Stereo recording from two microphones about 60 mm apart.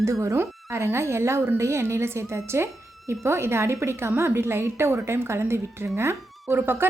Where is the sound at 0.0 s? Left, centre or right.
Right.